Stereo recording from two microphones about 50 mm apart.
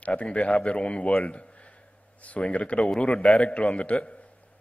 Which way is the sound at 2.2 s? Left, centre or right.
Left.